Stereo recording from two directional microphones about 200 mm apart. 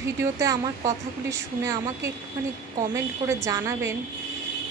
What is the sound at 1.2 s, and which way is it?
A woman's voice, 15° right (ahead or behind).